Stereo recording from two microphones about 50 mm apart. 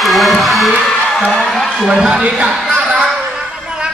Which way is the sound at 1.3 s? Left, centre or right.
Centre.